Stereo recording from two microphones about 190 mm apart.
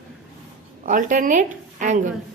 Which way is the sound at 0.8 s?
45° right (ahead or behind).